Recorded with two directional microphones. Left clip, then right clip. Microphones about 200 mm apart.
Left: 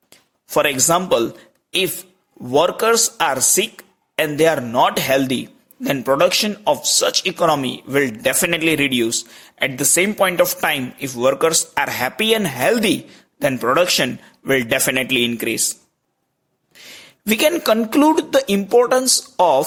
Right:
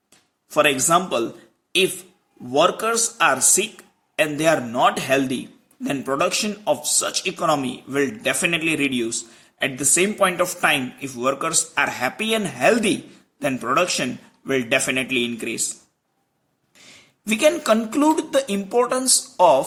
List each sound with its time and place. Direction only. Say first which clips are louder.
0.5 s speech: left 1 dB; 45° left (ahead or behind)
2.5 s speech: left 3 dB; 45° left (ahead or behind)